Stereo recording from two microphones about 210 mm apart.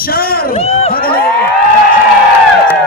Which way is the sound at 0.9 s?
45° left (ahead or behind).